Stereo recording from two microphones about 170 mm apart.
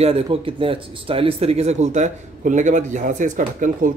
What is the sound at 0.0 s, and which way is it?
Speech, 35° right (ahead or behind).